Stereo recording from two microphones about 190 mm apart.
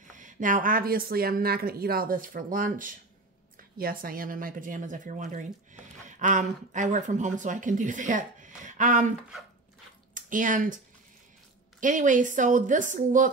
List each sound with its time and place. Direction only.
0.1 s a woman's voice: 45° right (ahead or behind)
10.1 s speech: 45° right (ahead or behind)
11.8 s a woman's voice: 45° right (ahead or behind)